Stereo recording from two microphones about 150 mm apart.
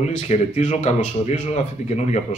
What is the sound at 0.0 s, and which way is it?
Speech, 45° left (ahead or behind).